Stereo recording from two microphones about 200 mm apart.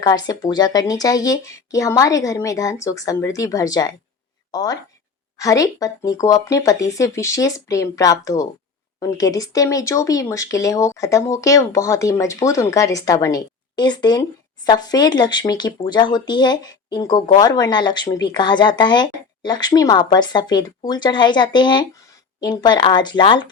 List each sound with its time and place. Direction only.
0.0 s speech: 20° left (ahead or behind)